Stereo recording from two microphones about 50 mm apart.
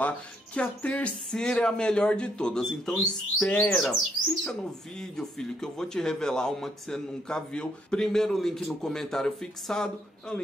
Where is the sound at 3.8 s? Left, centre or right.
Centre.